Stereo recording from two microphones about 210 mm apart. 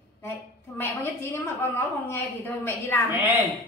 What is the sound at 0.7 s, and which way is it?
A woman's voice, 10° left (ahead or behind).